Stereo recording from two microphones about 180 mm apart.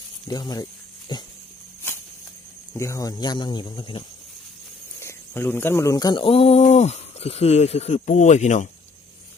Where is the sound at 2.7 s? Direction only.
15° left (ahead or behind).